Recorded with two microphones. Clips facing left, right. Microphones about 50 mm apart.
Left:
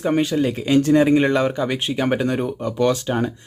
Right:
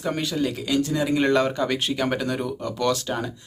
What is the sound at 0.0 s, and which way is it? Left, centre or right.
Speech, left.